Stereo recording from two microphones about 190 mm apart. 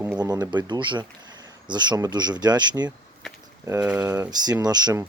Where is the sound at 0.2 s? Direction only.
20° right (ahead or behind).